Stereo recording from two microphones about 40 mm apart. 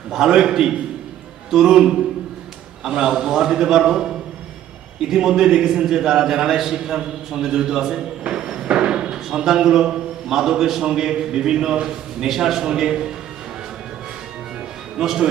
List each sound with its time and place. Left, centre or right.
0.1 s a man's voice: centre
8.3 s a sound: centre
8.7 s a man's voice: right
12.2 s a man's voice: centre
14.9 s speech: centre